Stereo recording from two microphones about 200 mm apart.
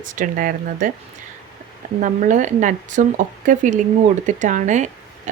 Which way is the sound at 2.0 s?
40° right (ahead or behind).